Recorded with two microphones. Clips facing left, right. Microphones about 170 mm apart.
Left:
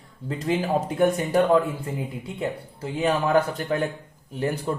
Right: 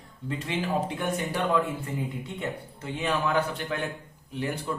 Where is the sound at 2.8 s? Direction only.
40° left (ahead or behind).